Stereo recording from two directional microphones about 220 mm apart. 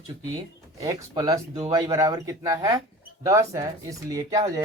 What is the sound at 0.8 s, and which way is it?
Speech, 15° right (ahead or behind).